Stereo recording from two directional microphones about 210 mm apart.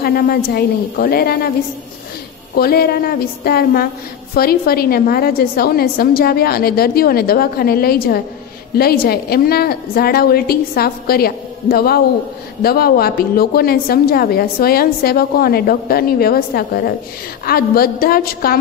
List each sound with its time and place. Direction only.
0.0 s a woman's voice: 45° left (ahead or behind)
2.5 s a woman's voice: 45° left (ahead or behind)